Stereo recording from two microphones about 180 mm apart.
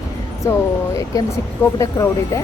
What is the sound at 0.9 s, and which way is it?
Speech, 20° left (ahead or behind).